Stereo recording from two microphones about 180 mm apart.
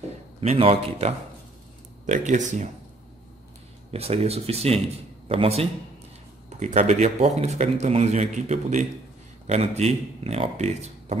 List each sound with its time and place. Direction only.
0.4 s speech: 35° right (ahead or behind)
3.9 s speech: 35° right (ahead or behind)